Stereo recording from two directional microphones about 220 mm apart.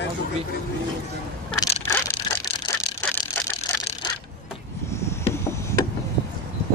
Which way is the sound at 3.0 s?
5° left (ahead or behind).